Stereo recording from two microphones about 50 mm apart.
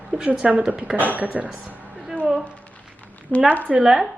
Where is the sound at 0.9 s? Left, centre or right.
Right.